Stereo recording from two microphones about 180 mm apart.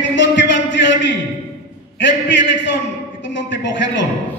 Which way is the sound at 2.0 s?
80° left.